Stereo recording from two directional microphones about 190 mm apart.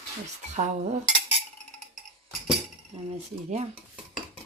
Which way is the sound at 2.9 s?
35° right (ahead or behind).